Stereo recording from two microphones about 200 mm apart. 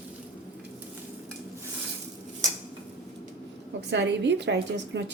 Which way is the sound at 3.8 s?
60° right (ahead or behind).